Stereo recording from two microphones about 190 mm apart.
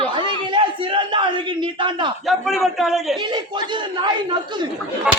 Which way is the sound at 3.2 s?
25° right (ahead or behind).